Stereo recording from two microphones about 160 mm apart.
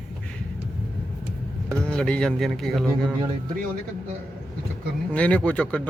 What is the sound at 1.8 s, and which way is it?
Speech, 5° left (ahead or behind).